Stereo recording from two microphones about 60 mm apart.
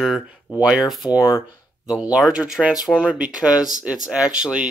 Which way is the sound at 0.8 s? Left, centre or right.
Centre.